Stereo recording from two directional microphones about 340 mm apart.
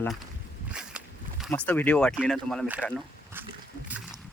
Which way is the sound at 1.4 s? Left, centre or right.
Centre.